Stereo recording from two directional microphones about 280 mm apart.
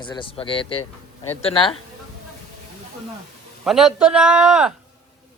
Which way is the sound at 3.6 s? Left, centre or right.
Centre.